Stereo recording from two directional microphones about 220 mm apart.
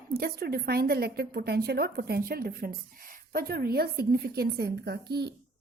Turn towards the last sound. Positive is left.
turn(degrees=-50)  # may be behind; listen again after turning